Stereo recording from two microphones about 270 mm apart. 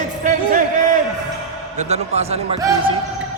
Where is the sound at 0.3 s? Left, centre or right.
Right.